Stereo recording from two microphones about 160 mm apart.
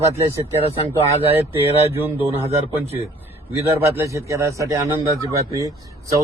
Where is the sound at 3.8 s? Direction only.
15° right (ahead or behind).